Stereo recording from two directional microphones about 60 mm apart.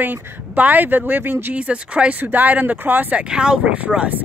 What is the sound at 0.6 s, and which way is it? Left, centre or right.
Speech, right.